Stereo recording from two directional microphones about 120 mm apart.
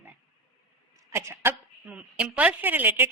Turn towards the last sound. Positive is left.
turn(degrees=-15)  # may be behind; listen again after turning